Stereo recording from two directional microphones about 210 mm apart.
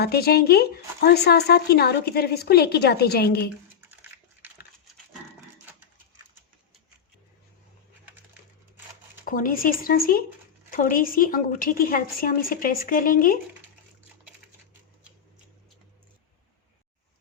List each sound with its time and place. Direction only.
0.0 s a woman's voice: 50° left (ahead or behind)
9.2 s a woman's voice: 40° left (ahead or behind)